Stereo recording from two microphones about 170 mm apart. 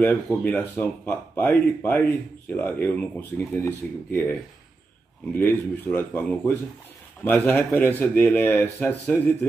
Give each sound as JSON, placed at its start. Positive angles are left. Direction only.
{"t": 0.0, "sound": "speech", "side_deg": 10}